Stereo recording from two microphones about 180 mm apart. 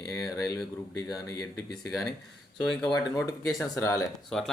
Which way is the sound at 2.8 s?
25° left (ahead or behind).